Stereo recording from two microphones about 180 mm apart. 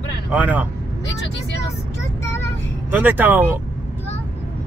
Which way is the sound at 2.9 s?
10° right (ahead or behind).